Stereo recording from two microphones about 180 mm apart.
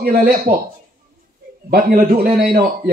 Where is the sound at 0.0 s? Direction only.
55° right (ahead or behind).